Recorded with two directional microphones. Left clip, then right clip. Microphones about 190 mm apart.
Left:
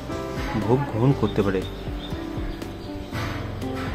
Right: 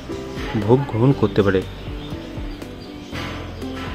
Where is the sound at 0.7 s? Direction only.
15° right (ahead or behind).